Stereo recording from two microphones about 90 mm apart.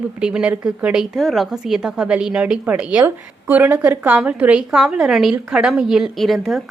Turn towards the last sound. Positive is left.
turn(degrees=0)  # may be behind; listen again after turning